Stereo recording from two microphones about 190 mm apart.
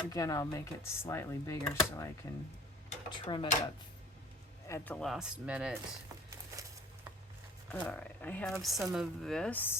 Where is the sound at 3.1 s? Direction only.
25° left (ahead or behind).